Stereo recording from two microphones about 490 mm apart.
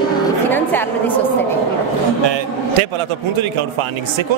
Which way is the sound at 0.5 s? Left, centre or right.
Centre.